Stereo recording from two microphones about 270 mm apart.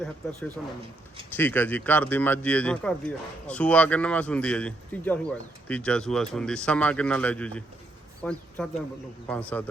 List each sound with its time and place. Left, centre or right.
0.0 s a man's voice: centre